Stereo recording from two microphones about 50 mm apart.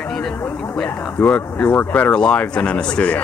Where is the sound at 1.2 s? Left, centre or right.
Left.